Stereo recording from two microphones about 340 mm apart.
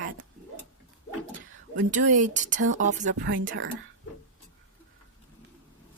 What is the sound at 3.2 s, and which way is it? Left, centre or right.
Speech, right.